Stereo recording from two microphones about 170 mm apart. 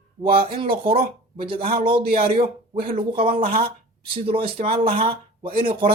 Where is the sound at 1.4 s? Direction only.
35° right (ahead or behind).